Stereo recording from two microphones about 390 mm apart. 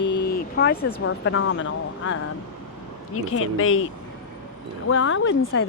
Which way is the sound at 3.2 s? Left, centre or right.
Left.